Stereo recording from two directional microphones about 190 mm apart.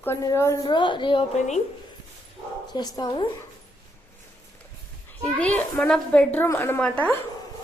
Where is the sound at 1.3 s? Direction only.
40° left (ahead or behind).